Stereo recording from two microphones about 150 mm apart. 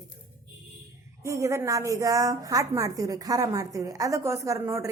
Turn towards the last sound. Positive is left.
turn(degrees=-20)  # may be behind; listen again after turning